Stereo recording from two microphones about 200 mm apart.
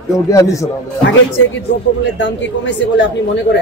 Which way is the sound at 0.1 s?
15° left (ahead or behind).